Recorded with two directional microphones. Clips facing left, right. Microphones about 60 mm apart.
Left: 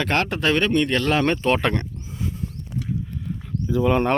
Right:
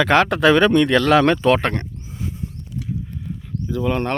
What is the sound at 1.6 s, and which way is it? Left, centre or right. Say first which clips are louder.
Speech: even; right.